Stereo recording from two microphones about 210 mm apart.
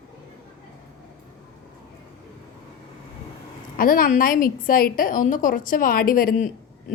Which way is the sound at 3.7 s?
45° left (ahead or behind).